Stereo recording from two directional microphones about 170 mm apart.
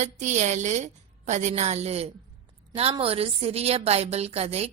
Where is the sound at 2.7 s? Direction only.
35° right (ahead or behind).